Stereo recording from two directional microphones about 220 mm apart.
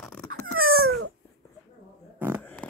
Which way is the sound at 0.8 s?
75° right (ahead or behind).